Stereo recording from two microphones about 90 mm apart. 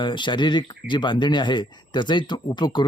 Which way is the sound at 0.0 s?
60° left (ahead or behind).